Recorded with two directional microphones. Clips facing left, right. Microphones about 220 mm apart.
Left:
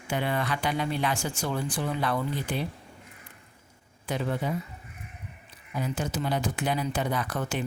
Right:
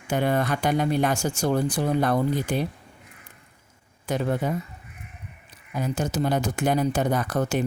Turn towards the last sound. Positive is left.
turn(degrees=-40)  # may be behind; listen again after turning